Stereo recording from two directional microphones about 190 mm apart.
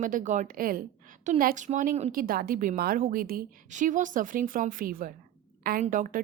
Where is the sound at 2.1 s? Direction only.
50° right (ahead or behind).